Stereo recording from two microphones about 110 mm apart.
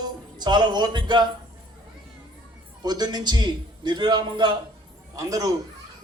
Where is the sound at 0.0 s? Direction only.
40° right (ahead or behind).